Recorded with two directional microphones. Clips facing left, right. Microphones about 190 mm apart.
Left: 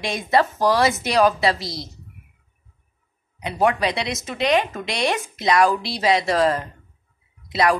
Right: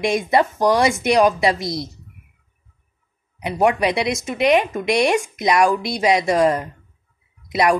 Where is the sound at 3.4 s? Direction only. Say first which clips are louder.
Right 3 dB; 15° right (ahead or behind).